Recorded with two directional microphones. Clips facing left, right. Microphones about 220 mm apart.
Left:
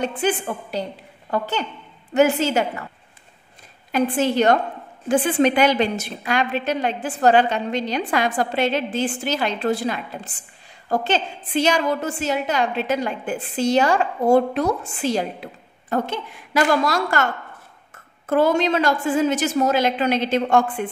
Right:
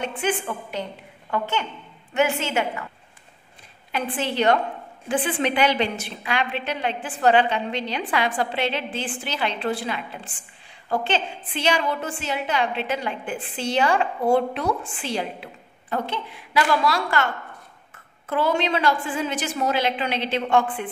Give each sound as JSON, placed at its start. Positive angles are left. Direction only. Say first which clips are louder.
{"t": 0.0, "sound": "a woman's voice", "louder": "left 3 dB", "side_deg": 35}
{"t": 3.9, "sound": "a woman's voice", "louder": "left 7 dB", "side_deg": 45}